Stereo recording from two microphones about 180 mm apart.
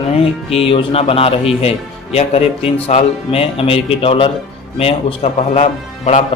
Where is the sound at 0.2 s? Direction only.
30° left (ahead or behind).